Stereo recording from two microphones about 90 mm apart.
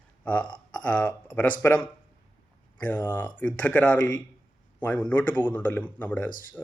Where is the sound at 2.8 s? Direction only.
20° left (ahead or behind).